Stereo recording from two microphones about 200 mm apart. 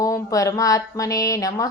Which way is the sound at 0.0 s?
15° left (ahead or behind).